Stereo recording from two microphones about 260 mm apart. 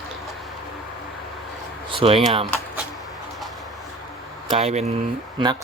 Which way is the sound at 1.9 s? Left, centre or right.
Right.